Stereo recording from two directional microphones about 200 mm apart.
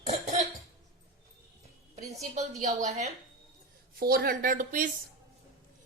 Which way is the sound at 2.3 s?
35° right (ahead or behind).